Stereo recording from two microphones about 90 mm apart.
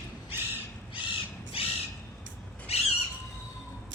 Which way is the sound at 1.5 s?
90° left.